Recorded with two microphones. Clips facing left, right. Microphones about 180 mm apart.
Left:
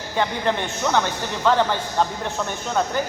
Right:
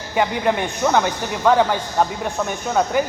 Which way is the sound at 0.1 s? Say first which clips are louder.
Right 3 dB; 10° right (ahead or behind).